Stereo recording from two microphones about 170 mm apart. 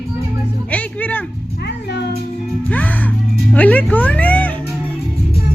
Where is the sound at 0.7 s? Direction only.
10° left (ahead or behind).